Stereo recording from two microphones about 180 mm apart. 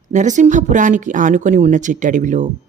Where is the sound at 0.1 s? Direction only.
45° right (ahead or behind).